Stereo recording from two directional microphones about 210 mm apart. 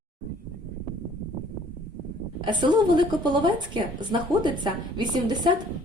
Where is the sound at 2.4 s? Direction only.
20° right (ahead or behind).